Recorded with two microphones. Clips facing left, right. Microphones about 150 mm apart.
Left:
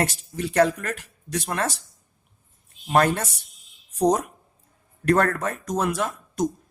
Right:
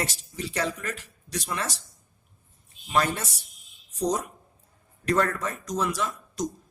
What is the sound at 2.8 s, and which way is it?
Speech, 55° left (ahead or behind).